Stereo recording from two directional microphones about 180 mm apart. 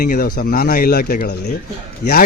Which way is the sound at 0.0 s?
55° left (ahead or behind).